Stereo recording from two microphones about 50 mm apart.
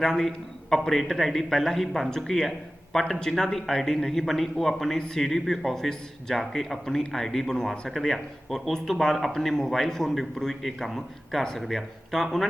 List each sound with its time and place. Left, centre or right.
0.0 s speech: centre
4.9 s speech: centre
5.2 s speech: centre